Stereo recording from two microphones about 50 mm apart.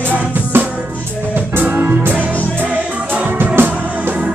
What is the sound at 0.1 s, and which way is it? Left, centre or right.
Music, right.